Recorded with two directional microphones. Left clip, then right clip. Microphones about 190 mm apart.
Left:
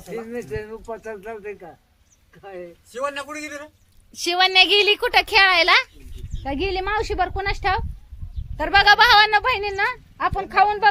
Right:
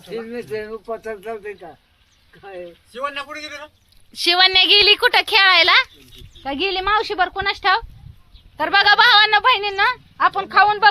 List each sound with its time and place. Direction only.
0.2 s speech: 45° right (ahead or behind)
2.9 s a man's voice: 60° left (ahead or behind)
4.1 s speech: 5° right (ahead or behind)